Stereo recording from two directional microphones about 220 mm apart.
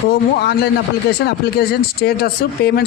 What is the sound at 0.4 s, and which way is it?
Speech, 45° left (ahead or behind).